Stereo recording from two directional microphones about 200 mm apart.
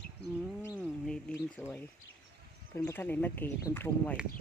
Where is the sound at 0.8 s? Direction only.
5° left (ahead or behind).